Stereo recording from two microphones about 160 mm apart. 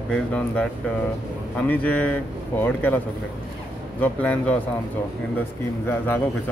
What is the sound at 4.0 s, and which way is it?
Speech, 10° left (ahead or behind).